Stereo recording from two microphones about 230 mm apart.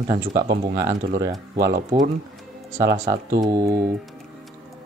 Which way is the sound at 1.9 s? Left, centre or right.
Centre.